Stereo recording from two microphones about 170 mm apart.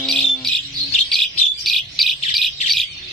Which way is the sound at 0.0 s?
5° left (ahead or behind).